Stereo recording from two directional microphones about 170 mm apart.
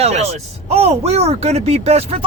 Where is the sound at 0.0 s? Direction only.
40° right (ahead or behind).